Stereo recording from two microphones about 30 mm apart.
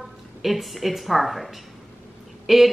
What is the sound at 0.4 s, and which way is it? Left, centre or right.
Speech, centre.